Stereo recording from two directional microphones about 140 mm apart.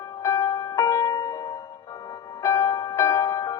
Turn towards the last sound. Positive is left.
turn(degrees=25)  # may be behind; listen again after turning